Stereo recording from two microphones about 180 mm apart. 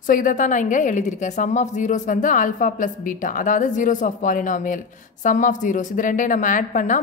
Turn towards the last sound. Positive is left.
turn(degrees=45)  # may be behind; listen again after turning